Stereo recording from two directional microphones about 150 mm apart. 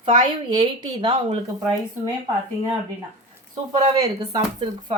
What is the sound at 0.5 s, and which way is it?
Speech, 30° right (ahead or behind).